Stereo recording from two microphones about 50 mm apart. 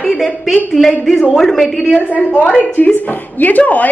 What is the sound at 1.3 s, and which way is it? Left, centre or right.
Speech, centre.